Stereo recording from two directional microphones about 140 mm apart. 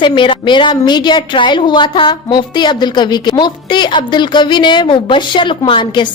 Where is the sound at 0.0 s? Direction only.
35° left (ahead or behind).